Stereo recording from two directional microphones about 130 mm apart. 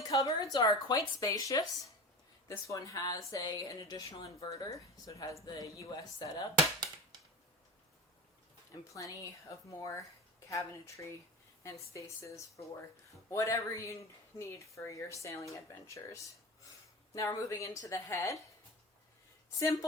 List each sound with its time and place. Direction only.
0.1 s speech: 25° left (ahead or behind)
8.9 s speech: 25° left (ahead or behind)
19.5 s speech: 25° left (ahead or behind)